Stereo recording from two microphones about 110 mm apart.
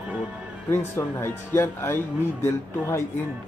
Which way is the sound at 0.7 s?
20° left (ahead or behind).